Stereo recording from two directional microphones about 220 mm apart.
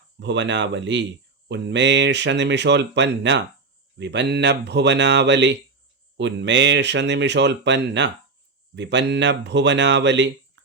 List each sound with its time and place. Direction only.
0.2 s speech: 55° right (ahead or behind)